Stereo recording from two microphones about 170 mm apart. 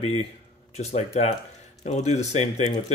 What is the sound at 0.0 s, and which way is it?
Speech, 35° left (ahead or behind).